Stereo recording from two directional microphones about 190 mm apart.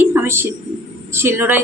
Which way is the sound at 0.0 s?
10° right (ahead or behind).